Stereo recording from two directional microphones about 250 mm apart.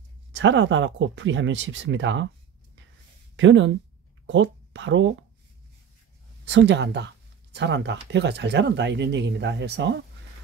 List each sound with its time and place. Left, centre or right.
0.3 s speech: right
3.3 s speech: right
6.4 s speech: right